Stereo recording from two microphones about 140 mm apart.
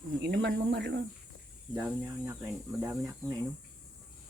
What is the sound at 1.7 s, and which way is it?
Speech, 10° right (ahead or behind).